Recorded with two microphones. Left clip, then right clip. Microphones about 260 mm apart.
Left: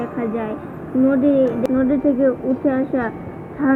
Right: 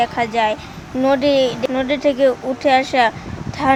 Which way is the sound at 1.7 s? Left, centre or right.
Right.